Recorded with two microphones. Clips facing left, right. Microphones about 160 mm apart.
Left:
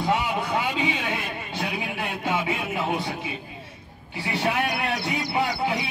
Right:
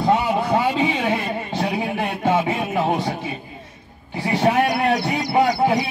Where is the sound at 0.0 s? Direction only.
45° right (ahead or behind).